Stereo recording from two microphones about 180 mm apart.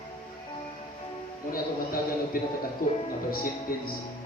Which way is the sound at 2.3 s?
55° left (ahead or behind).